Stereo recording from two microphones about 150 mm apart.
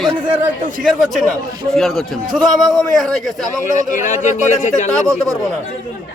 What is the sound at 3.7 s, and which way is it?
A man's voice, 55° left (ahead or behind).